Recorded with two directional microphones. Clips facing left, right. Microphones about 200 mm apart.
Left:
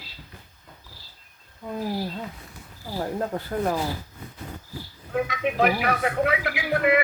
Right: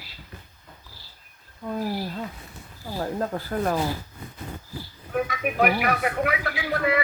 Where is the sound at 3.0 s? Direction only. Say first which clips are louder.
Even; 20° left (ahead or behind).